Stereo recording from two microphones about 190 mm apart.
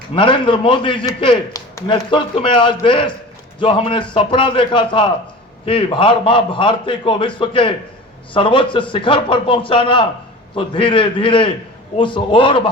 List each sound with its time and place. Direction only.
0.1 s a man's voice: 25° left (ahead or behind)